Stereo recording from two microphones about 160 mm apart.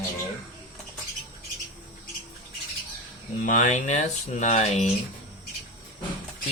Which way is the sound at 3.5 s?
50° left (ahead or behind).